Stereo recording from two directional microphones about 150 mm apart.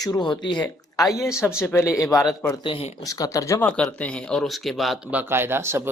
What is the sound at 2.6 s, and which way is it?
Speech, 35° left (ahead or behind).